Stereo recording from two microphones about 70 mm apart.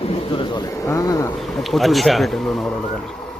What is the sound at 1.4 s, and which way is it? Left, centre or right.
Speech, centre.